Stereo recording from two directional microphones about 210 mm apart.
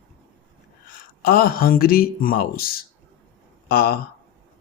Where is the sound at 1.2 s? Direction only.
45° left (ahead or behind).